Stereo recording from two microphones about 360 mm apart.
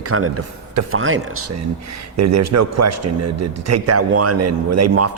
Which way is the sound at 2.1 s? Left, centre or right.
Right.